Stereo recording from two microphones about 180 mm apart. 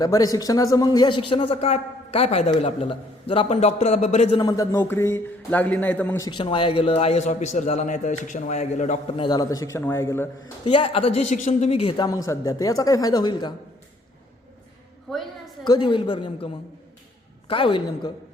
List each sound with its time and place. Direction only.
0.0 s a man's voice: 20° left (ahead or behind); by 4.4 s 40° left (ahead or behind)
4.4 s speech: 20° left (ahead or behind)
6.2 s a man's voice: 25° left (ahead or behind)
9.2 s speech: 20° left (ahead or behind)
10.6 s a woman's voice: 30° left (ahead or behind)
15.1 s a woman's voice: 5° left (ahead or behind)
15.6 s a woman's voice: 25° left (ahead or behind)
17.5 s a woman's voice: 30° left (ahead or behind)